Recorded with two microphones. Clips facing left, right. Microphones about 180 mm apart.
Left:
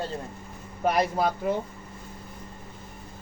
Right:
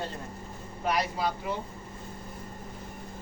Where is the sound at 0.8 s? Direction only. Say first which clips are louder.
Left 5 dB; 50° left (ahead or behind).